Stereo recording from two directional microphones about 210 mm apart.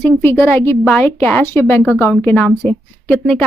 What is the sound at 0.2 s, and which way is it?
A woman's voice, 10° left (ahead or behind).